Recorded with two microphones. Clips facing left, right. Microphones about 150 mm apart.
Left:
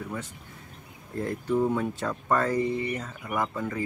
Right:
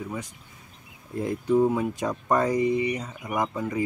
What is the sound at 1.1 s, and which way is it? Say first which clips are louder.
Speech: right 4 dB; 15° right (ahead or behind).